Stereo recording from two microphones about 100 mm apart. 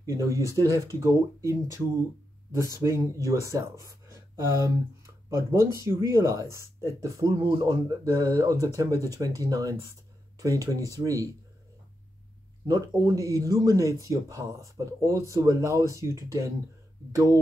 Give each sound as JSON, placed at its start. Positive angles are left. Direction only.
{"t": 0.0, "sound": "speech", "side_deg": -30}
{"t": 12.6, "sound": "speech", "side_deg": -35}